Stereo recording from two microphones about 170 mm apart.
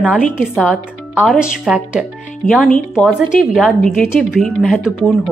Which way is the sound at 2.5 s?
5° left (ahead or behind).